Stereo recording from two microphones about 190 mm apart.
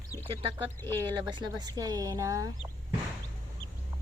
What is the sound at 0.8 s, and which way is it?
Speech, 10° left (ahead or behind).